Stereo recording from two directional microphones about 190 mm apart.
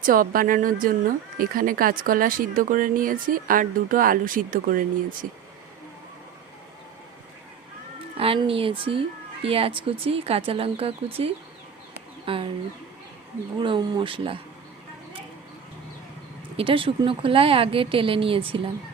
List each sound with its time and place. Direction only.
0.0 s speech: 50° right (ahead or behind)
8.2 s speech: 30° right (ahead or behind)
13.6 s speech: 25° right (ahead or behind)
16.6 s speech: 30° right (ahead or behind)